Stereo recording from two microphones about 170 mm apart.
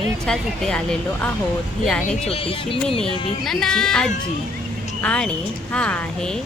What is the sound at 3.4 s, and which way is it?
A woman's voice, 5° left (ahead or behind).